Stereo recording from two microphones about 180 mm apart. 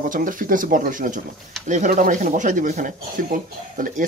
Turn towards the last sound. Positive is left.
turn(degrees=-50)  # may be behind; listen again after turning